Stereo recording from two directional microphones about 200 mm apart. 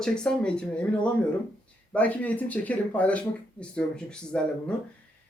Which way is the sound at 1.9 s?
5° left (ahead or behind).